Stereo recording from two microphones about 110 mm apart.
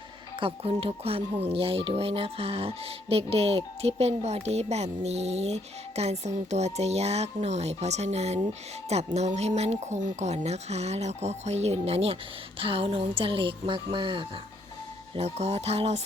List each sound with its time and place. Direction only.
0.3 s speech: 55° right (ahead or behind)
15.1 s speech: 75° right (ahead or behind)